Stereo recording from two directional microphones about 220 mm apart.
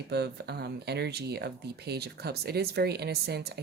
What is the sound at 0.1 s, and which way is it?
Speech, 50° right (ahead or behind).